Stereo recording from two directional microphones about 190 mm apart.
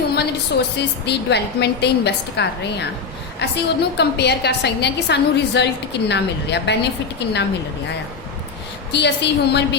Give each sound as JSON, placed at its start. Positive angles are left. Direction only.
{"t": 0.2, "sound": "a woman's voice", "side_deg": 60}
{"t": 8.9, "sound": "a woman's voice", "side_deg": 65}